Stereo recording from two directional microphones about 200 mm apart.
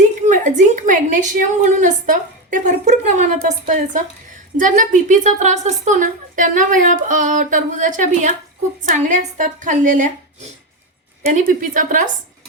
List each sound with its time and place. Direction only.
0.0 s a woman's voice: 35° right (ahead or behind)
11.3 s a woman's voice: 40° right (ahead or behind)